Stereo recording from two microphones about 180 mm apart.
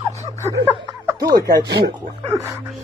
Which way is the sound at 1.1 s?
20° right (ahead or behind).